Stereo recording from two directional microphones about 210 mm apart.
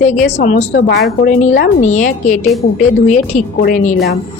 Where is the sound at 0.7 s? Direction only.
50° left (ahead or behind).